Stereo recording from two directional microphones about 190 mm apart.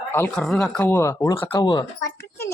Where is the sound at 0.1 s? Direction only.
5° left (ahead or behind).